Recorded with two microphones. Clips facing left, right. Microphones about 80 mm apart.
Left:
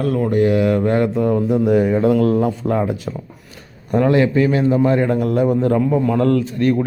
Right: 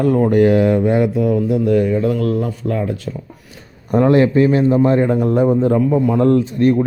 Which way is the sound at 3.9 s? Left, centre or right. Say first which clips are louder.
Right 2 dB; right.